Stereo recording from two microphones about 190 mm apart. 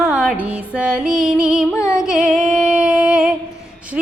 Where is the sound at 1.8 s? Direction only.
15° left (ahead or behind).